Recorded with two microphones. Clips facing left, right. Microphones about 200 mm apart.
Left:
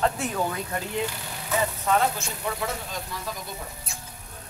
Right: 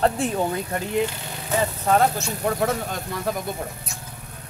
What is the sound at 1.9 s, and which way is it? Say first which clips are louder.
Speech: right 5 dB; 45° right (ahead or behind).